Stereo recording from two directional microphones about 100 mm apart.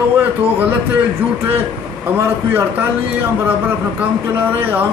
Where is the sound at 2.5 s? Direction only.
20° right (ahead or behind).